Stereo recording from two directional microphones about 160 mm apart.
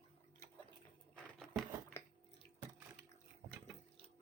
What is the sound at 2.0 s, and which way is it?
Chewing, 15° left (ahead or behind).